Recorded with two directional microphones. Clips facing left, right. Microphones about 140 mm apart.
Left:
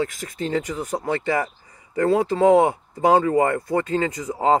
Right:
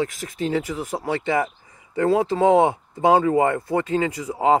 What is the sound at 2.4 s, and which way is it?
Speech, 25° right (ahead or behind).